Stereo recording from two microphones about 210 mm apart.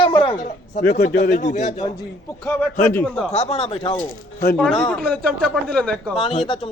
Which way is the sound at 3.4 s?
30° left (ahead or behind).